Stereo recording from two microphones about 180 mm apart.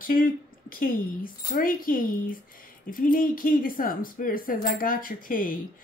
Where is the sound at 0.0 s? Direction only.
50° left (ahead or behind).